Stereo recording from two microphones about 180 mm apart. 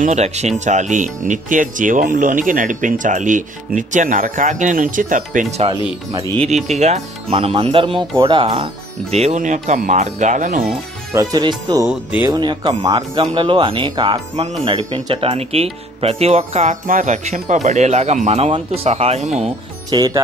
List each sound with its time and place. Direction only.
0.0 s speech: 40° right (ahead or behind)
9.1 s speech: 40° right (ahead or behind)
11.1 s speech: 20° right (ahead or behind)
11.9 s speech: 5° right (ahead or behind)
12.3 s speech: 25° right (ahead or behind)
19.9 s speech: 20° right (ahead or behind)